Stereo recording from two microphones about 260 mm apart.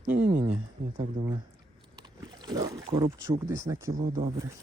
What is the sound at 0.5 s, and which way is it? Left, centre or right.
Speech, right.